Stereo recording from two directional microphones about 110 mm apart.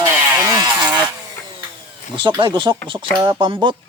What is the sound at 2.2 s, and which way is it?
Speech, 45° right (ahead or behind).